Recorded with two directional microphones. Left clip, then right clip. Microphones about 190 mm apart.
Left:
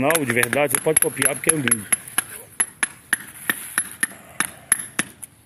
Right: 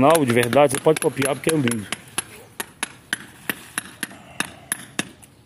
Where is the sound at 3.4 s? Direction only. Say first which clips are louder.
Left 4 dB; 15° left (ahead or behind).